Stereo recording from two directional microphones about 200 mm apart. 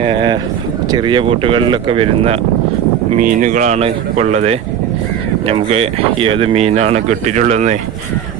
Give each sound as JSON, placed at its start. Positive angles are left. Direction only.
{"t": 0.0, "sound": "speech", "side_deg": -25}
{"t": 3.2, "sound": "speech", "side_deg": -40}